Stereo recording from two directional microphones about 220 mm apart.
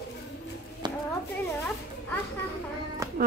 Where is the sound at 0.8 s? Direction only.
20° right (ahead or behind).